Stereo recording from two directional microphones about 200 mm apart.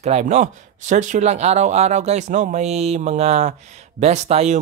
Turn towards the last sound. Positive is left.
turn(degrees=-35)  # may be behind; listen again after turning